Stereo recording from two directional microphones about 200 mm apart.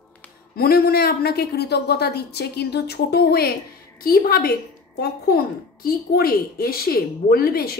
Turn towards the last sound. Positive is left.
turn(degrees=50)  # may be behind; listen again after turning